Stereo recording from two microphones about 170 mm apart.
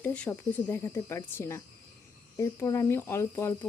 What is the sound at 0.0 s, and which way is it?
Speech, 10° left (ahead or behind).